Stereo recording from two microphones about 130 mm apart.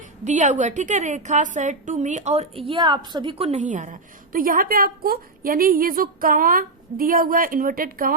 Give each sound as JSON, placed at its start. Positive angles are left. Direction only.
{"t": 0.3, "sound": "a woman's voice", "side_deg": -65}